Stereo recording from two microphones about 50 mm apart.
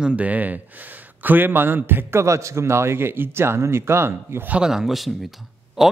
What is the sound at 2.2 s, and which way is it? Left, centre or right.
Speech, right.